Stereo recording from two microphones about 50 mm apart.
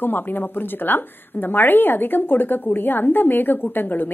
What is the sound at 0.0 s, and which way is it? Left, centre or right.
A woman's voice, left.